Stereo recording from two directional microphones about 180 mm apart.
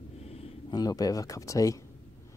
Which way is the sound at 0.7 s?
20° left (ahead or behind).